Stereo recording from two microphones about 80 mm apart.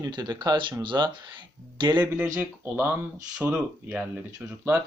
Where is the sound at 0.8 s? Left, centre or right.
Right.